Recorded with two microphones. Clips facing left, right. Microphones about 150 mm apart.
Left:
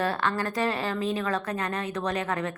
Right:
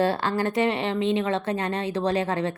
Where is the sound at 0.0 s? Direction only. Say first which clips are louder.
Right 4 dB; 30° right (ahead or behind).